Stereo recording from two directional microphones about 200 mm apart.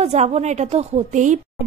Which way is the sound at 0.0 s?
35° right (ahead or behind).